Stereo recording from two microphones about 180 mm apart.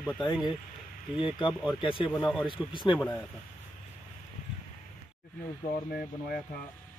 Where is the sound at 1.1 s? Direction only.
30° left (ahead or behind).